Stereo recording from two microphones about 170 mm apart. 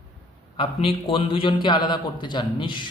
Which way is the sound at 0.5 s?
35° left (ahead or behind).